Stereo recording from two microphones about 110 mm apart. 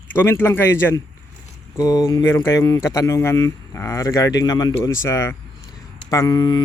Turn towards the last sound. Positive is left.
turn(degrees=40)  # may be behind; listen again after turning